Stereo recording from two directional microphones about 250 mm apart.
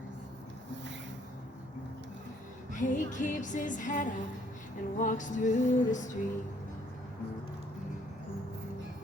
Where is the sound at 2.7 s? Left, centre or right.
Left.